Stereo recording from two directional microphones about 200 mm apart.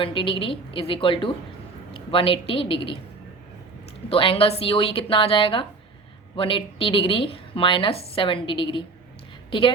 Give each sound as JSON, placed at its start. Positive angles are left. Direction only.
{"t": 0.0, "sound": "a woman's voice", "side_deg": 25}
{"t": 4.1, "sound": "a woman's voice", "side_deg": 30}